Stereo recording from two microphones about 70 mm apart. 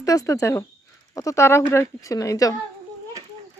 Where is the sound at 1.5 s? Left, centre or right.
Left.